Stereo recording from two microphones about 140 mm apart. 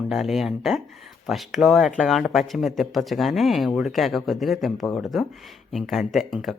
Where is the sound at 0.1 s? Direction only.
Centre (ahead or behind).